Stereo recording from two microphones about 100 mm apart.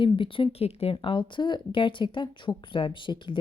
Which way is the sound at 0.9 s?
55° left (ahead or behind).